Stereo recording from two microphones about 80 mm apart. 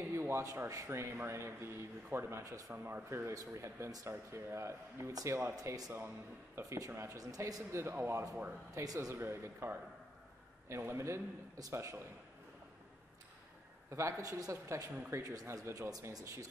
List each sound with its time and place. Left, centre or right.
0.1 s speech: right
6.6 s speech: right
7.8 s speech: right
8.7 s speech: right
9.2 s speech: right
13.8 s a man's voice: right